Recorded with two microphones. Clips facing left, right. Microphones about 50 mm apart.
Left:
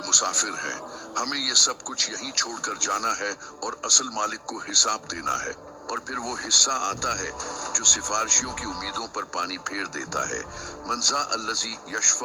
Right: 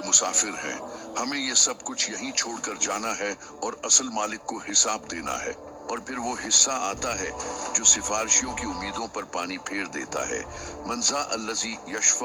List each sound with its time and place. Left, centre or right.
0.0 s speech: right